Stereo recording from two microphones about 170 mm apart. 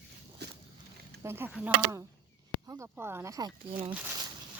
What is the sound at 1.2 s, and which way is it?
Speech, 15° right (ahead or behind).